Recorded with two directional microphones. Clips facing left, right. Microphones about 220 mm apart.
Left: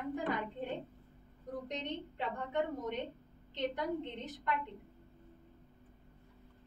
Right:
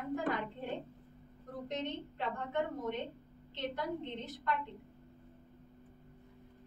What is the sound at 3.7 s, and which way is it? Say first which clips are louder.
Speech: left 1 dB; 15° left (ahead or behind).